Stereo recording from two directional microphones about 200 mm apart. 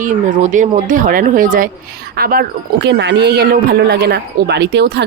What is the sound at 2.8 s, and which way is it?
Speech, 60° right (ahead or behind).